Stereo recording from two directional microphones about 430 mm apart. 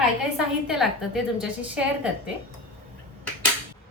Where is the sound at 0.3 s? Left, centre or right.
Centre.